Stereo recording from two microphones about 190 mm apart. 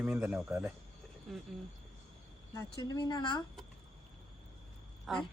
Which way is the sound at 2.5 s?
20° left (ahead or behind).